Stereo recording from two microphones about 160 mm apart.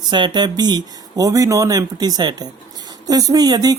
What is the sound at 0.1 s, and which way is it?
A woman's voice, 30° right (ahead or behind).